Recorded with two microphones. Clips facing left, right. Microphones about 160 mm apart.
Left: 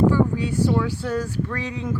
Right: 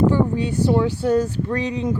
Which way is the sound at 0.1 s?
20° right (ahead or behind).